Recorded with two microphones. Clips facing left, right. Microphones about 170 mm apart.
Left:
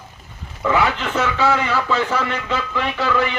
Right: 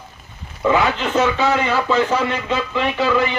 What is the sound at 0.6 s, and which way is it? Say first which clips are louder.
A man's voice: right 2 dB; 20° right (ahead or behind).